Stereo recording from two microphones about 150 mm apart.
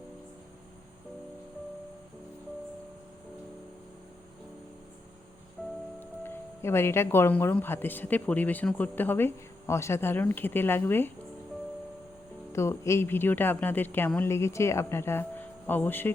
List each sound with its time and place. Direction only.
6.0 s speech: 15° left (ahead or behind)
12.5 s speech: 20° left (ahead or behind)